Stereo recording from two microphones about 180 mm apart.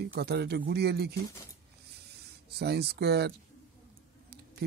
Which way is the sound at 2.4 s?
65° right (ahead or behind).